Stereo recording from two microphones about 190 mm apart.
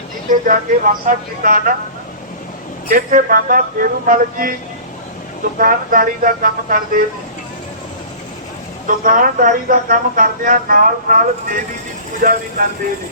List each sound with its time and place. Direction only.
0.3 s speech: 45° right (ahead or behind)
2.9 s speech: 45° right (ahead or behind)
5.5 s speech: 50° right (ahead or behind)
9.0 s speech: 45° right (ahead or behind)